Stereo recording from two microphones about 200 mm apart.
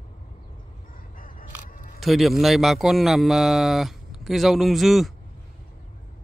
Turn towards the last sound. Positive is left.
turn(degrees=0)  # may be behind; listen again after turning